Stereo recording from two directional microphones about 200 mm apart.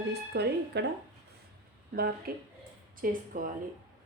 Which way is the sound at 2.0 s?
50° right (ahead or behind).